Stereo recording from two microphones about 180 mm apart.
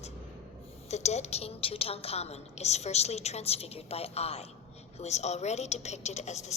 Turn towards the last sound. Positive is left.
turn(degrees=40)  # may be behind; listen again after turning